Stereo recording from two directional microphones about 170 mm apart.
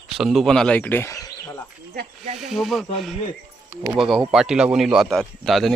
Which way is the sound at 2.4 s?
Centre (ahead or behind).